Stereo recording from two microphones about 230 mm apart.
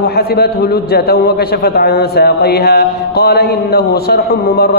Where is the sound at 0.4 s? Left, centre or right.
Left.